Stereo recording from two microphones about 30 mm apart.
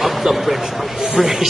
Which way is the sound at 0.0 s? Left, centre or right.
Centre.